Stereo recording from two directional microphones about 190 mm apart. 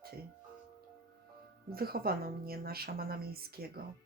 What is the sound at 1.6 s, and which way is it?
Speech, 55° right (ahead or behind).